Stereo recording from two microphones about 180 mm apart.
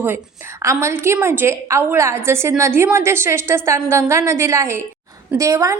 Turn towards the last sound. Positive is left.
turn(degrees=-15)  # may be behind; listen again after turning